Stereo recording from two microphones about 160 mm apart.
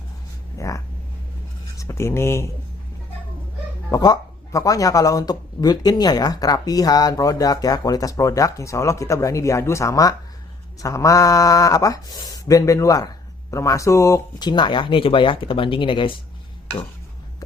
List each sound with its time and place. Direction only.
0.6 s speech: 20° left (ahead or behind)
1.8 s speech: 15° left (ahead or behind)
3.9 s speech: 25° left (ahead or behind)